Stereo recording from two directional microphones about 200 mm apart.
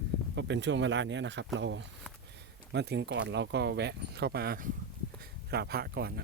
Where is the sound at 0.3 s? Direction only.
65° right (ahead or behind).